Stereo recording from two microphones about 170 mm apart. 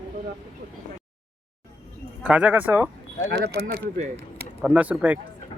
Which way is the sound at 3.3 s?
80° right.